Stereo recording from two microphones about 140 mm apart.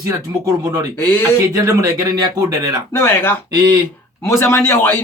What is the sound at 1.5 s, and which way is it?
Speech, 25° right (ahead or behind).